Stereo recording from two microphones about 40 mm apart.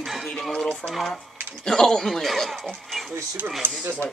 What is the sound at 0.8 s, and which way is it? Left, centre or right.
Speech, centre.